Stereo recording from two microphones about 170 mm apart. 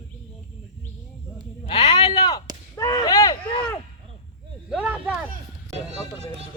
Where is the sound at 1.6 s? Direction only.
35° left (ahead or behind).